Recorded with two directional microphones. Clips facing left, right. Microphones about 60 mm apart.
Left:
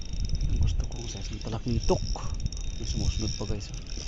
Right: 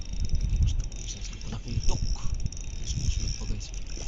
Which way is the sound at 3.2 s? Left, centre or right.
Centre.